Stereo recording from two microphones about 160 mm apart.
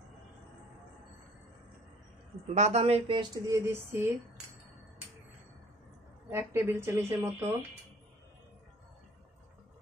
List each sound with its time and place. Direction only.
2.4 s a woman's voice: 45° right (ahead or behind)
3.2 s speech: 20° right (ahead or behind)
6.3 s speech: 15° right (ahead or behind)